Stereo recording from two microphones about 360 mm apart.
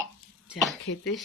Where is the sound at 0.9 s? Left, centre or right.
Left.